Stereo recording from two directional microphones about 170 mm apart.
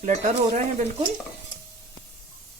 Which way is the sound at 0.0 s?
45° right (ahead or behind).